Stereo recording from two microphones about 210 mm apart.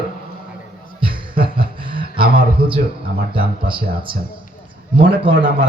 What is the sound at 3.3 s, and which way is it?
Speech, 25° right (ahead or behind).